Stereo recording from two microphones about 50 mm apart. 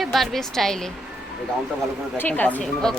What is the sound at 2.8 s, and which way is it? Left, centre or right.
Speech, centre.